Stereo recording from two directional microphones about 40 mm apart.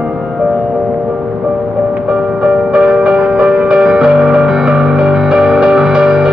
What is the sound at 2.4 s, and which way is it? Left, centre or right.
Music, centre.